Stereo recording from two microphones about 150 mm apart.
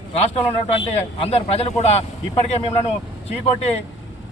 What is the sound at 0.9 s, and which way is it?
Speech, 45° left (ahead or behind).